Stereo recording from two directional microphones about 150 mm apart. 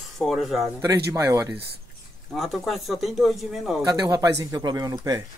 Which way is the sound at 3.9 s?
25° right (ahead or behind).